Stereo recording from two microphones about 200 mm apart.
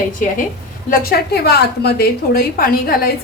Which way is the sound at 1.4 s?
55° left (ahead or behind).